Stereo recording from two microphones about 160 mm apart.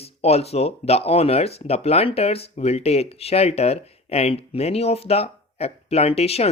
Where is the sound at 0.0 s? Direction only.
40° left (ahead or behind).